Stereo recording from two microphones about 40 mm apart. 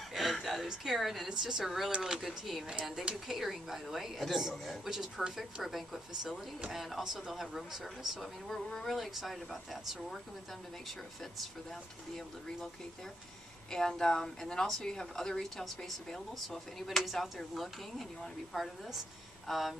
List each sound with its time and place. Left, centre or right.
0.1 s a sound: centre
0.9 s a woman's voice: centre
2.2 s a woman's voice: centre
8.2 s a woman's voice: centre
8.9 s speech: centre
13.7 s a woman's voice: centre
16.4 s speech: centre
18.5 s speech: centre